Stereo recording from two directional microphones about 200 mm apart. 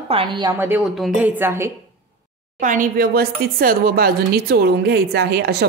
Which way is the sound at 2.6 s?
40° right (ahead or behind).